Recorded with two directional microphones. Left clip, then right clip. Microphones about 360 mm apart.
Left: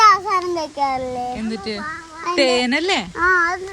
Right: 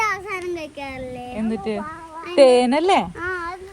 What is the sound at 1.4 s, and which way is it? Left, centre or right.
A woman's voice, centre.